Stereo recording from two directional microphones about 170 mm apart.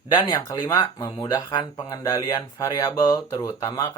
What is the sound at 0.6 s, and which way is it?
Speech, 20° left (ahead or behind).